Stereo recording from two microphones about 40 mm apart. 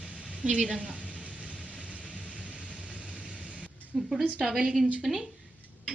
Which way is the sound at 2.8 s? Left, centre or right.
Right.